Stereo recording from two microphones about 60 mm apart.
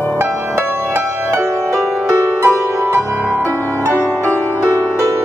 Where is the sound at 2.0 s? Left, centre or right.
Right.